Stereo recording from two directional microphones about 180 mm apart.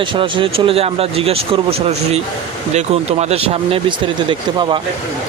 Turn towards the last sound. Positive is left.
turn(degrees=-25)  # may be behind; listen again after turning